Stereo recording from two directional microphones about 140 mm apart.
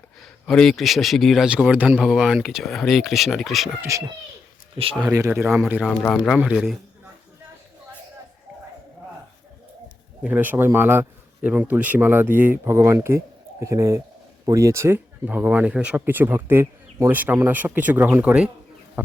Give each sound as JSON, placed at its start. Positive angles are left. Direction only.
{"t": 0.4, "sound": "speech", "side_deg": 5}
{"t": 3.8, "sound": "a child's voice", "side_deg": -20}
{"t": 4.8, "sound": "speech", "side_deg": -40}
{"t": 5.4, "sound": "speech", "side_deg": -15}
{"t": 5.8, "sound": "speech", "side_deg": 5}
{"t": 10.2, "sound": "speech", "side_deg": -10}
{"t": 19.0, "sound": "a sound", "side_deg": -10}